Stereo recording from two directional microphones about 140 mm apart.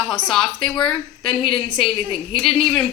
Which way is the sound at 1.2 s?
40° left (ahead or behind).